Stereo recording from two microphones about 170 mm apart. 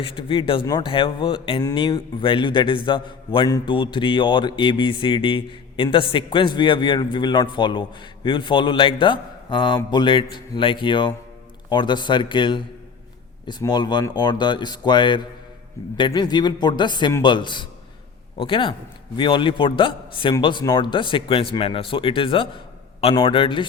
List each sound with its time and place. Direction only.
0.0 s a man's voice: 30° left (ahead or behind)